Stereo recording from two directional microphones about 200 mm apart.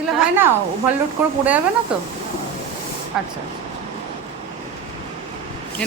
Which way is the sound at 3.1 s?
Centre (ahead or behind).